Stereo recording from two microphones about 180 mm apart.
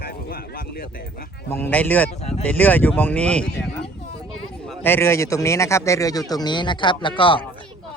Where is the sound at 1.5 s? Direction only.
10° left (ahead or behind).